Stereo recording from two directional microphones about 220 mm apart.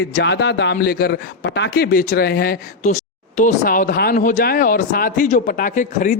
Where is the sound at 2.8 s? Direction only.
30° left (ahead or behind).